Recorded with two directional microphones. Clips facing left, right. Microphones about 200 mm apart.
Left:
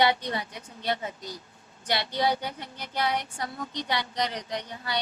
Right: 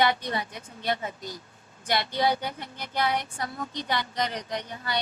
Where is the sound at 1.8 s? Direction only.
50° right (ahead or behind).